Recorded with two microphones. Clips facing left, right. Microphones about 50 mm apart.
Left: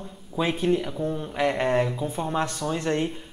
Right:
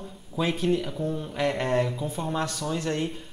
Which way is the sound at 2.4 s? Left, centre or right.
Left.